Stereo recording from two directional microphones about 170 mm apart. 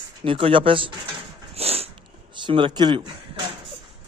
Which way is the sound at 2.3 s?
30° right (ahead or behind).